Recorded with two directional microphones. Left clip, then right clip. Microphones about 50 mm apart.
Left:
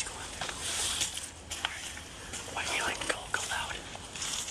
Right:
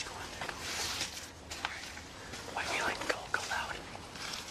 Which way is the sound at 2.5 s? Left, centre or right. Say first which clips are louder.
Left 2 dB; centre.